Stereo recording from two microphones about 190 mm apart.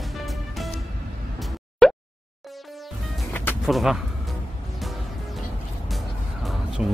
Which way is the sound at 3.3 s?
10° left (ahead or behind).